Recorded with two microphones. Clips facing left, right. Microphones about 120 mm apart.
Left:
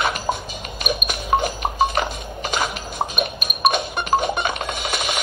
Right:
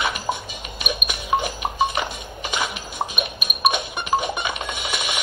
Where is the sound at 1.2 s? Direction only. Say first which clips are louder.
Left 2 dB; 40° left (ahead or behind).